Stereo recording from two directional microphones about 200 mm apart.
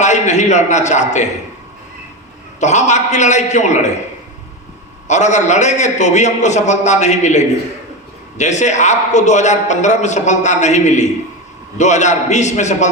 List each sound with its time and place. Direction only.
0.0 s a man's voice: 35° left (ahead or behind)
2.6 s a man's voice: 35° left (ahead or behind)
5.0 s a man's voice: 35° left (ahead or behind)